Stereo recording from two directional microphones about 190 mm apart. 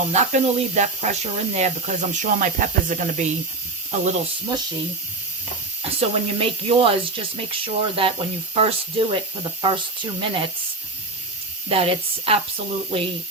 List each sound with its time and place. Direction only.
0.1 s speech: 40° right (ahead or behind)
5.8 s speech: 30° right (ahead or behind)
11.7 s speech: 30° right (ahead or behind)